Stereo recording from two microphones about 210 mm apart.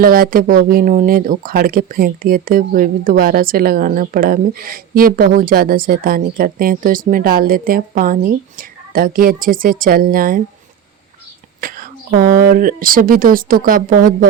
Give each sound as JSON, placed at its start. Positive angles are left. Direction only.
{"t": 0.0, "sound": "speech", "side_deg": -45}
{"t": 11.6, "sound": "speech", "side_deg": -40}